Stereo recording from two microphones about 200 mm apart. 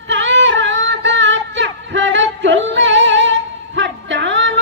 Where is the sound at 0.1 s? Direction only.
65° right (ahead or behind).